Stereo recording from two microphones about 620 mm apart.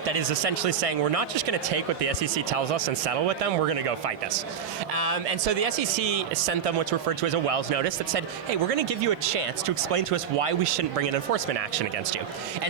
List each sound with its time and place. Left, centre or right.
0.1 s speech: right
4.9 s speech: right